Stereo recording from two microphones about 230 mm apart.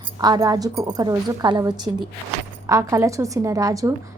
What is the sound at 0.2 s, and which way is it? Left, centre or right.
A woman's voice, centre.